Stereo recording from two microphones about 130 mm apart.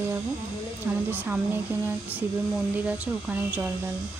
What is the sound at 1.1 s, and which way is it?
Speech, 15° right (ahead or behind).